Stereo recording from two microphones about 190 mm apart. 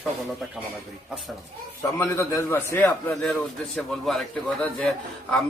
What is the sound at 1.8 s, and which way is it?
A man's voice, 15° left (ahead or behind).